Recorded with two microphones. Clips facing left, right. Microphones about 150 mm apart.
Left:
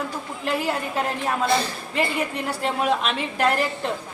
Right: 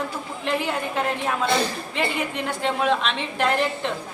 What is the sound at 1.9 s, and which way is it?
A woman's voice, 5° left (ahead or behind).